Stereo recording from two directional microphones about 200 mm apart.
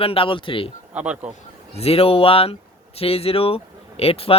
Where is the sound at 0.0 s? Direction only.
30° left (ahead or behind).